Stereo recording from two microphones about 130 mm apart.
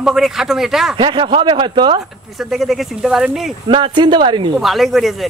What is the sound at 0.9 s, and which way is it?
Speech, 40° right (ahead or behind).